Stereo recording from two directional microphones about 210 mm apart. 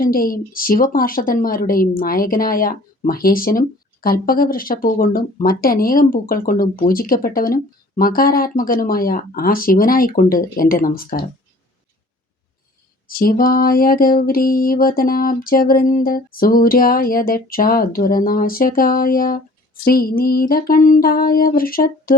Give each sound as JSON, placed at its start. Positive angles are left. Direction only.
{"t": 0.0, "sound": "a woman's voice", "side_deg": 45}
{"t": 13.1, "sound": "a woman's voice", "side_deg": 45}